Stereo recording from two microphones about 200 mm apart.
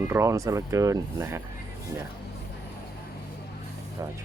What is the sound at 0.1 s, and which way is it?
Speech, 15° right (ahead or behind).